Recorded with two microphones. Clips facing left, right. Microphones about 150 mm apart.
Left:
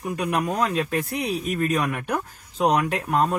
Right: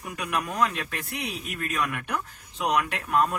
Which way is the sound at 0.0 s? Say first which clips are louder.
Left 6 dB; 30° left (ahead or behind).